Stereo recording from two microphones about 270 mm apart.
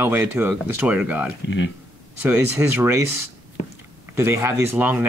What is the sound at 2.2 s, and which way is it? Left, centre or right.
Speech, centre.